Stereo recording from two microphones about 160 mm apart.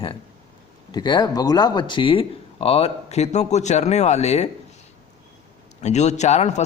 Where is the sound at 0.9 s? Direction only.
25° left (ahead or behind); by 4.4 s 45° left (ahead or behind).